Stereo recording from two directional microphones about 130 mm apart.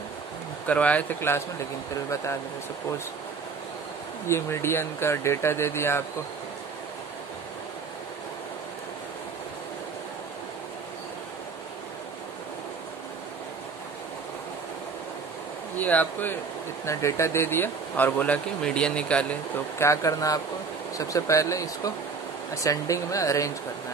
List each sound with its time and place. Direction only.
0.7 s speech: 10° left (ahead or behind)
4.3 s speech: 20° left (ahead or behind)
15.8 s speech: 10° left (ahead or behind)
19.8 s speech: 25° left (ahead or behind)